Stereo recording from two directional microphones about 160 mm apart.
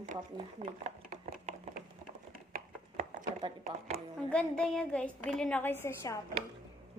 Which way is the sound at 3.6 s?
60° right (ahead or behind).